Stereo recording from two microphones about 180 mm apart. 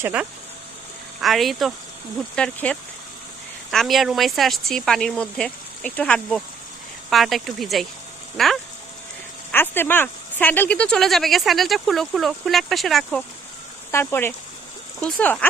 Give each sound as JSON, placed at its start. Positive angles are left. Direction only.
{"t": 0.0, "sound": "speech", "side_deg": -10}
{"t": 13.9, "sound": "speech", "side_deg": 15}